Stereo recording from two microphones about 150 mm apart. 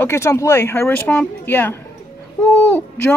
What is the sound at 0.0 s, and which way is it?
Speech, 20° left (ahead or behind).